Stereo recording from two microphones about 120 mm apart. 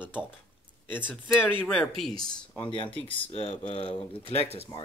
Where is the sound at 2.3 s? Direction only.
40° left (ahead or behind).